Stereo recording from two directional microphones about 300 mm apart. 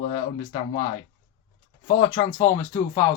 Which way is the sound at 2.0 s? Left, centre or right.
Centre.